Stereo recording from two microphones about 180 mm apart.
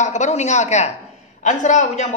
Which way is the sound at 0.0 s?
40° left (ahead or behind).